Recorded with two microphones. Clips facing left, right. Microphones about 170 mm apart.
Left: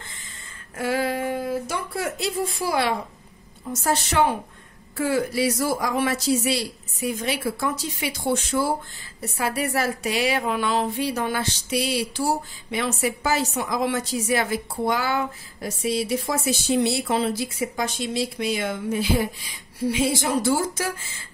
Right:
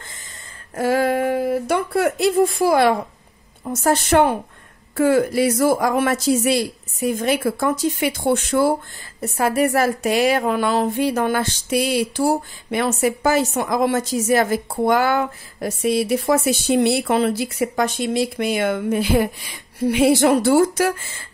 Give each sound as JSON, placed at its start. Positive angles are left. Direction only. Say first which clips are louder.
{"t": 0.7, "sound": "a woman's voice", "louder": "right 6 dB", "side_deg": -45}
{"t": 9.2, "sound": "a woman's voice", "louder": "right 7 dB", "side_deg": -45}